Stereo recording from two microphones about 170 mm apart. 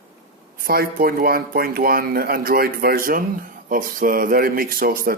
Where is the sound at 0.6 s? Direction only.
60° right (ahead or behind).